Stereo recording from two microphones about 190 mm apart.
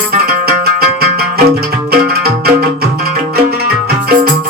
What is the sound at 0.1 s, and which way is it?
Music, 55° right (ahead or behind).